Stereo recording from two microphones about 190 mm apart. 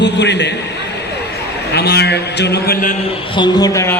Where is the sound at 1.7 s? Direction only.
60° left (ahead or behind).